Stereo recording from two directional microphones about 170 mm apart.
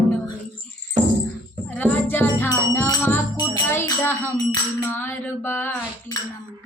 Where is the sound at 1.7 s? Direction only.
10° left (ahead or behind).